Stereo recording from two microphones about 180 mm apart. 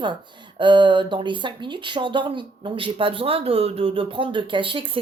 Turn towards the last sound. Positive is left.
turn(degrees=-30)  # may be behind; listen again after turning